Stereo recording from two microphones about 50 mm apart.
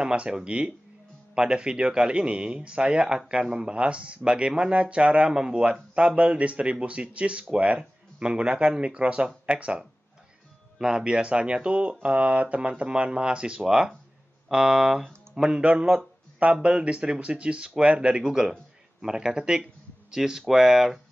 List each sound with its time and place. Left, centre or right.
0.0 s speech: centre
16.6 s speech: right